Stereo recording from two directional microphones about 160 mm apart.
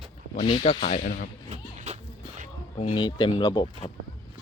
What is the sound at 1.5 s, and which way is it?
Music, 45° right (ahead or behind).